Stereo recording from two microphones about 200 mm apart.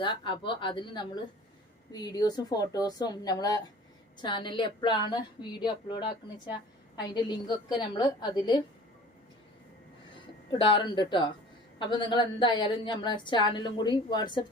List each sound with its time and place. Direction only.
0.0 s a woman's voice: 25° left (ahead or behind)
10.5 s a woman's voice: 25° left (ahead or behind)